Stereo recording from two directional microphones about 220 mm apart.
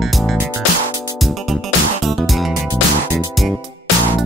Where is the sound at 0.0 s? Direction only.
Centre (ahead or behind).